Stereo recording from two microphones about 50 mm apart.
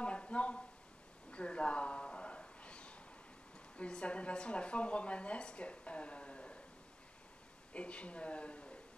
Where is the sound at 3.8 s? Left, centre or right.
Left.